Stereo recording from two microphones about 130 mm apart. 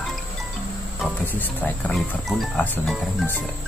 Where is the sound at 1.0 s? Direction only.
15° left (ahead or behind).